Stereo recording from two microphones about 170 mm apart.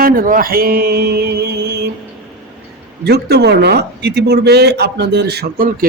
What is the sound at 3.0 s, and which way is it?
Speech, 70° right (ahead or behind).